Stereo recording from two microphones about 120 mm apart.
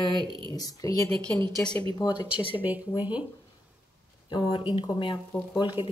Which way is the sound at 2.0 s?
35° left (ahead or behind).